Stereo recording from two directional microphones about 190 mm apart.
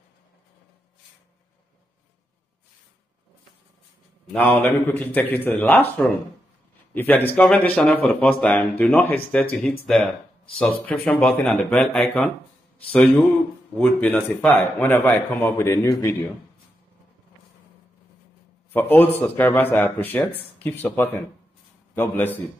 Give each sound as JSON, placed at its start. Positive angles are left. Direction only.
{"t": 4.3, "sound": "speech", "side_deg": 10}
{"t": 13.7, "sound": "speech", "side_deg": 5}
{"t": 18.7, "sound": "speech", "side_deg": 10}